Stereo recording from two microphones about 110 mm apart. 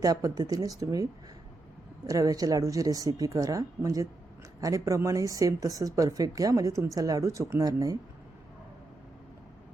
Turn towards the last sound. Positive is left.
turn(degrees=-30)  # may be behind; listen again after turning